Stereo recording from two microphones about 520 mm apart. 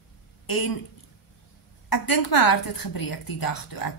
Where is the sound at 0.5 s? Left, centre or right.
Left.